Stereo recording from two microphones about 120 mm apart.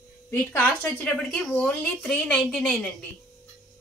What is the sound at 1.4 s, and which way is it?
A woman's voice, 5° left (ahead or behind).